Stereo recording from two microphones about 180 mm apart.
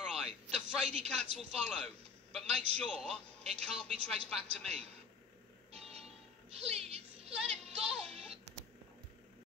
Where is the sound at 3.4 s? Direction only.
35° right (ahead or behind).